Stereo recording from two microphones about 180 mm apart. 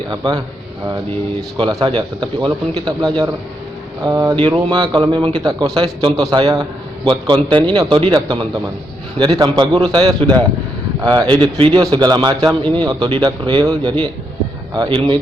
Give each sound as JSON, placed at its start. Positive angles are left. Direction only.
{"t": 1.4, "sound": "a man's voice", "side_deg": -25}